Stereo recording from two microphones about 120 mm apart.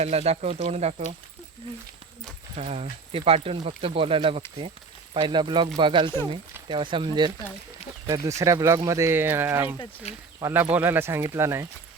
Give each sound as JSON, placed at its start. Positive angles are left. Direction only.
{"t": 0.0, "sound": "speech", "side_deg": -60}
{"t": 2.6, "sound": "speech", "side_deg": -60}
{"t": 8.0, "sound": "speech", "side_deg": -25}
{"t": 10.1, "sound": "speech", "side_deg": 65}
{"t": 10.4, "sound": "speech", "side_deg": -15}